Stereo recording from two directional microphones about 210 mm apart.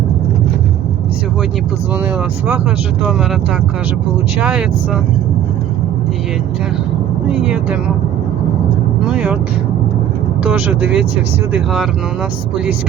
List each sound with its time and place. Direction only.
7.3 s speech: 5° right (ahead or behind)
9.0 s speech: 5° right (ahead or behind)
10.4 s speech: 5° right (ahead or behind)